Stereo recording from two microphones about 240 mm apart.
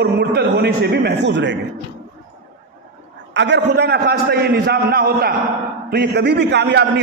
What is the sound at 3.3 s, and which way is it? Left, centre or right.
A man's voice, right.